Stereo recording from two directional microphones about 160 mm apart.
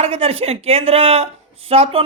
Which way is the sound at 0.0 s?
40° right (ahead or behind).